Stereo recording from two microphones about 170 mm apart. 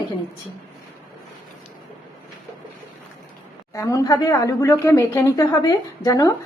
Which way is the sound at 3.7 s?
20° left (ahead or behind).